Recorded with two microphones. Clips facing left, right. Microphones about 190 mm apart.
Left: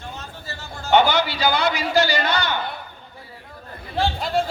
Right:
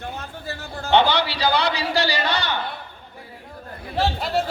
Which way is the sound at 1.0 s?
35° right (ahead or behind).